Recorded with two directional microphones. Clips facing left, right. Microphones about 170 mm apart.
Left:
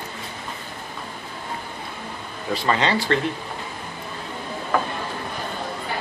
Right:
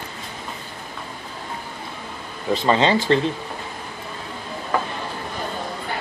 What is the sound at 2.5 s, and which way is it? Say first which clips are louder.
Speech: right 4 dB; 25° right (ahead or behind).